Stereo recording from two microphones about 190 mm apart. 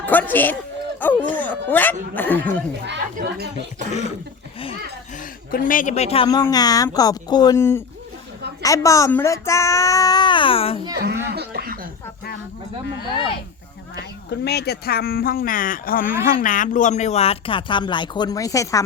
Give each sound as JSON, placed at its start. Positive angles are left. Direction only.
{"t": 0.0, "sound": "a man's voice", "side_deg": 10}
{"t": 3.2, "sound": "speech", "side_deg": -40}
{"t": 5.1, "sound": "a woman's voice", "side_deg": 45}
{"t": 6.2, "sound": "a child's voice", "side_deg": 20}
{"t": 10.9, "sound": "speech", "side_deg": -60}
{"t": 11.3, "sound": "a sound", "side_deg": -55}
{"t": 13.1, "sound": "speech", "side_deg": 25}
{"t": 14.3, "sound": "speech", "side_deg": 60}